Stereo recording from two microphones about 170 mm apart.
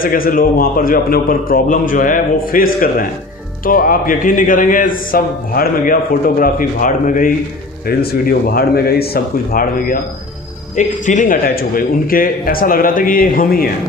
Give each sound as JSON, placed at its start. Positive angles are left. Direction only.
{"t": 0.0, "sound": "a man's voice", "side_deg": 55}